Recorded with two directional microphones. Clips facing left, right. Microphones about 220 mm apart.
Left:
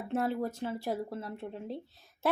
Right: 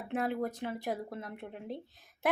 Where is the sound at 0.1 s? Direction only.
15° right (ahead or behind).